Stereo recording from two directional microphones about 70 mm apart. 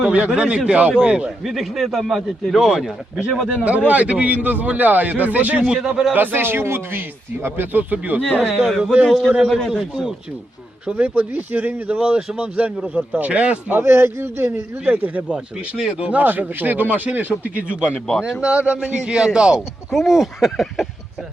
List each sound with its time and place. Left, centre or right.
0.0 s a man's voice: centre
1.5 s speech: centre
3.6 s a man's voice: centre
6.1 s a man's voice: right; by 10.2 s centre
10.8 s speech: right
13.7 s a man's voice: right; by 20.8 s centre